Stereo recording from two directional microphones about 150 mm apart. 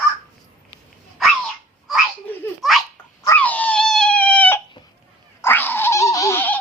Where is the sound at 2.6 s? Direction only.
Centre (ahead or behind).